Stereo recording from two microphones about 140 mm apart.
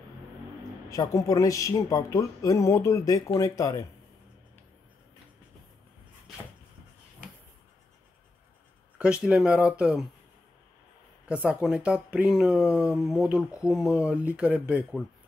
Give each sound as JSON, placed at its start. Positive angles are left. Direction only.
{"t": 0.8, "sound": "speech", "side_deg": 25}
{"t": 8.9, "sound": "speech", "side_deg": -5}
{"t": 11.2, "sound": "speech", "side_deg": -10}